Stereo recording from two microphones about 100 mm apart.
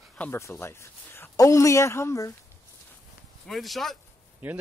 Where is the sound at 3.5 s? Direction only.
Centre (ahead or behind).